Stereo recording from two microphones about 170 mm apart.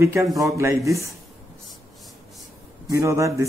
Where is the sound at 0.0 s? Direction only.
15° right (ahead or behind).